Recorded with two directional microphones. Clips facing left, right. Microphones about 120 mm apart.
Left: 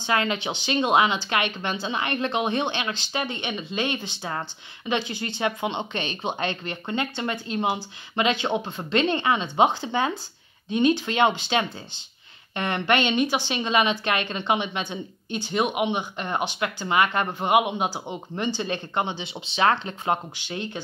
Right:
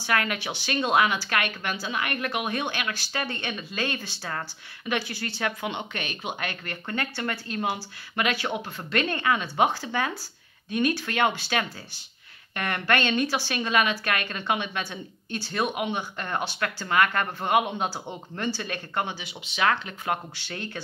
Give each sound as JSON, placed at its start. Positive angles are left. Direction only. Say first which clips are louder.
{"t": 0.0, "sound": "speech", "louder": "left 2 dB", "side_deg": 25}
{"t": 20.3, "sound": "speech", "louder": "left 4 dB", "side_deg": 15}